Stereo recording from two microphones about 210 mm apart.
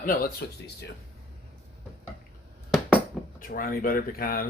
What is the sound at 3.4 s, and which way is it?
Speech, 40° left (ahead or behind).